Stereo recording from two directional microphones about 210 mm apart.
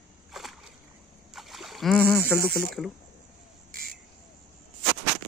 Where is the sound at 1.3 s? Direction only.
Centre (ahead or behind).